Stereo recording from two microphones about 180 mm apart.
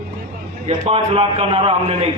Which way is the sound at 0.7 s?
35° right (ahead or behind).